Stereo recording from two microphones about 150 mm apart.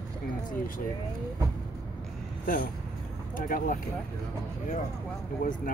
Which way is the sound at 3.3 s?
65° left (ahead or behind).